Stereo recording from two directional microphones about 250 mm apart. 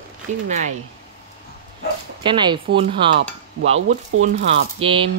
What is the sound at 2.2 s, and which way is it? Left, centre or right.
Speech, centre.